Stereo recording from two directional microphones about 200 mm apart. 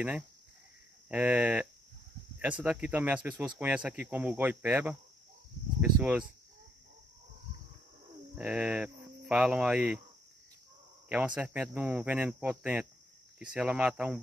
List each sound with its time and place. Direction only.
1.0 s speech: 5° right (ahead or behind)
8.4 s speech: 5° right (ahead or behind)
11.1 s speech: 5° right (ahead or behind)